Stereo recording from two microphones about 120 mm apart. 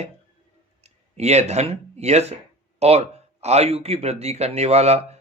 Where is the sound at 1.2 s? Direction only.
65° right (ahead or behind).